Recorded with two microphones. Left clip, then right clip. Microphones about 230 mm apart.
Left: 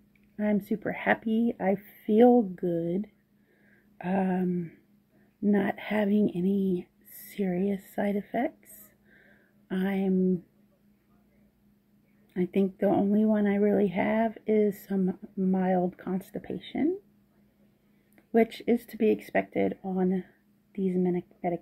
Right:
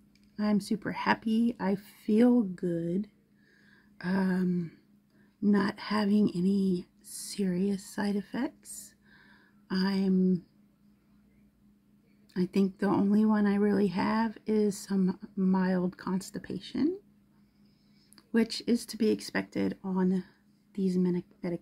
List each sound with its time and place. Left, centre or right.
0.7 s speech: centre
4.0 s speech: centre
5.5 s speech: centre
9.7 s speech: centre
12.4 s speech: centre
18.3 s speech: centre